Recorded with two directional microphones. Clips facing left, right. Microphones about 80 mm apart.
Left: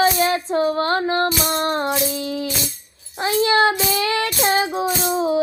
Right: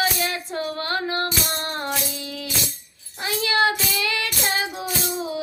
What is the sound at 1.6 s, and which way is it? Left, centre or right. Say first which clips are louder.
Music: left 7 dB; left.